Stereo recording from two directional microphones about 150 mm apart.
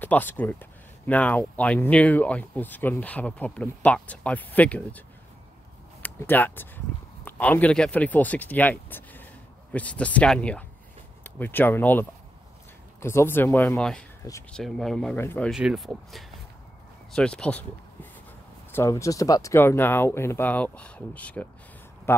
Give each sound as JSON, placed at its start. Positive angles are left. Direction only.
{"t": 0.0, "sound": "speech", "side_deg": 10}
{"t": 6.0, "sound": "speech", "side_deg": 15}
{"t": 13.7, "sound": "speech", "side_deg": 5}
{"t": 15.1, "sound": "speech", "side_deg": 15}
{"t": 15.5, "sound": "speech", "side_deg": -5}
{"t": 18.7, "sound": "speech", "side_deg": 15}